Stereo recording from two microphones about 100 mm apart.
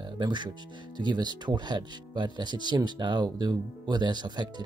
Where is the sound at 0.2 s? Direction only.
50° right (ahead or behind).